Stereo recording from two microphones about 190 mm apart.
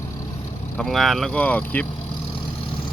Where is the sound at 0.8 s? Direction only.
Centre (ahead or behind).